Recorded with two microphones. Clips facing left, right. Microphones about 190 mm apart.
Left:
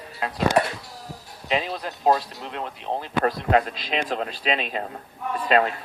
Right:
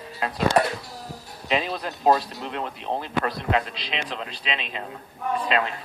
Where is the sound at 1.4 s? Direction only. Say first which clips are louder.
Even; 40° left (ahead or behind).